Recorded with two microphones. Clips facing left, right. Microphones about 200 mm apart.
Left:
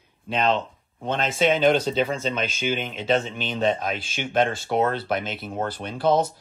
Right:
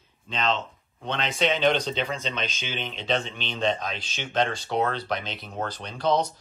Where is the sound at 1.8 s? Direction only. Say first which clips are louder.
Left 5 dB; 5° left (ahead or behind).